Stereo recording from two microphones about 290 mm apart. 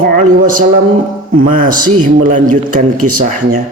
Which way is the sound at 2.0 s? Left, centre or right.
Right.